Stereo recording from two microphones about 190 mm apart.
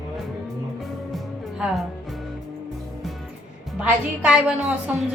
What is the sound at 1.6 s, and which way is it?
Speech, centre (ahead or behind).